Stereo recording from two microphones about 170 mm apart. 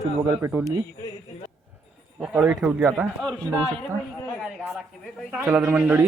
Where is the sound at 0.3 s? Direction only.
15° right (ahead or behind).